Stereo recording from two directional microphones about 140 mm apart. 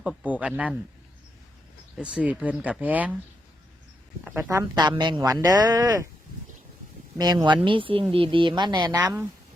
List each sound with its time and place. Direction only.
0.0 s speech: 5° right (ahead or behind)
2.0 s speech: 10° right (ahead or behind)
4.4 s speech: 20° right (ahead or behind)
7.2 s speech: 30° right (ahead or behind)